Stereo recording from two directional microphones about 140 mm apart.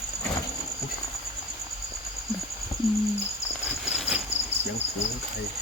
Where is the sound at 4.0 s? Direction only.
5° right (ahead or behind).